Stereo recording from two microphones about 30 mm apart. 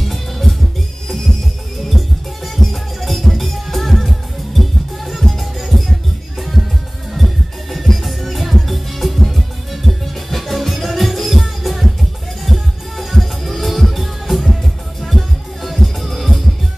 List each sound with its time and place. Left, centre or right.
0.0 s music: centre
1.9 s music: centre